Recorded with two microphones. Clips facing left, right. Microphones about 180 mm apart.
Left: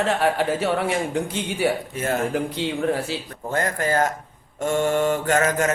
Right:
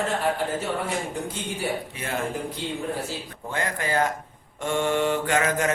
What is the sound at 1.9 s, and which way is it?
Mantra, 45° left (ahead or behind).